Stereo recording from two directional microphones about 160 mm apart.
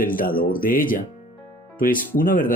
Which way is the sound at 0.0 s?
60° left (ahead or behind).